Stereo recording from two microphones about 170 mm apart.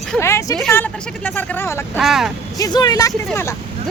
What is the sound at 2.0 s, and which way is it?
Speech, centre (ahead or behind).